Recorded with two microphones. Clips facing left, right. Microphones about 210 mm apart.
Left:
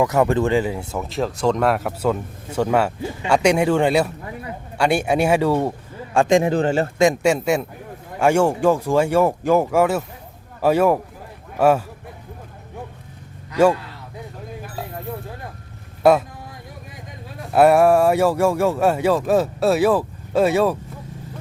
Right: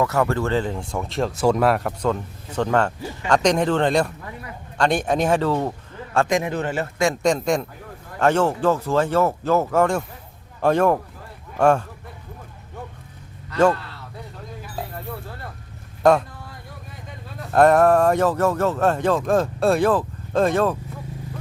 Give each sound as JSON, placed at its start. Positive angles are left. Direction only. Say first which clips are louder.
{"t": 0.0, "sound": "speech", "louder": "left 3 dB", "side_deg": 15}
{"t": 6.1, "sound": "a man's voice", "louder": "left 5 dB", "side_deg": 25}
{"t": 7.1, "sound": "speech", "louder": "left 2 dB", "side_deg": 10}
{"t": 13.5, "sound": "speech", "louder": "left 2 dB", "side_deg": 10}
{"t": 14.9, "sound": "a sound", "louder": "left 3 dB", "side_deg": 15}
{"t": 16.0, "sound": "speech", "louder": "left 2 dB", "side_deg": 5}
{"t": 17.5, "sound": "speech", "louder": "left 1 dB", "side_deg": 10}